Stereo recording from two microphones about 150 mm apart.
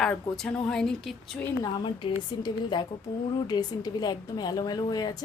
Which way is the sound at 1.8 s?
35° left (ahead or behind).